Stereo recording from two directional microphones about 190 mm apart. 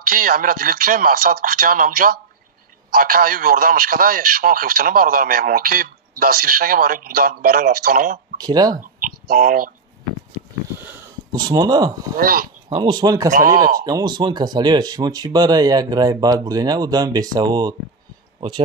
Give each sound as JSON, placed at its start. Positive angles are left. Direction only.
{"t": 0.0, "sound": "a man's voice", "side_deg": -50}
{"t": 8.4, "sound": "speech", "side_deg": -20}
{"t": 8.7, "sound": "a sound", "side_deg": -45}
{"t": 10.8, "sound": "sniff", "side_deg": -10}
{"t": 11.4, "sound": "speech", "side_deg": -20}
{"t": 12.2, "sound": "a man's voice", "side_deg": -50}
{"t": 12.6, "sound": "speech", "side_deg": -20}
{"t": 13.3, "sound": "a man's voice", "side_deg": -50}
{"t": 13.8, "sound": "speech", "side_deg": -20}